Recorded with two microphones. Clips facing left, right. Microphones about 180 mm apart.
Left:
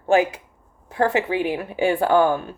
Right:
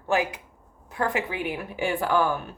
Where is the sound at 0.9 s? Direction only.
30° left (ahead or behind).